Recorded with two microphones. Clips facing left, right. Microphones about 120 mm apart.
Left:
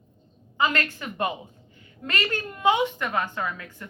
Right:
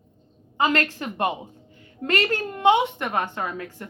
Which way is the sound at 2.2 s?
30° right (ahead or behind).